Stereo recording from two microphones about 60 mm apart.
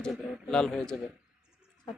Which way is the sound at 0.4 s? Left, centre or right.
Centre.